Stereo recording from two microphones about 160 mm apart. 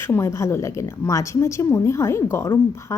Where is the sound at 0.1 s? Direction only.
20° left (ahead or behind).